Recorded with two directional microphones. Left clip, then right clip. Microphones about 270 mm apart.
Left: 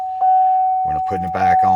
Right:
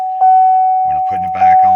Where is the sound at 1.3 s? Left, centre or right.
Centre.